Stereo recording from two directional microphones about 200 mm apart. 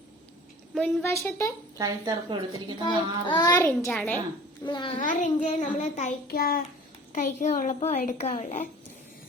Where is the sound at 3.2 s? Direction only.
20° left (ahead or behind).